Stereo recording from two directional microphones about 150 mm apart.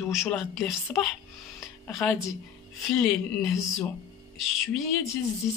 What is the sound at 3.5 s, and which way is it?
Speech, 20° left (ahead or behind).